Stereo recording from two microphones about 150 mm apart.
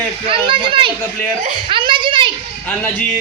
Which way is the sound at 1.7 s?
35° right (ahead or behind).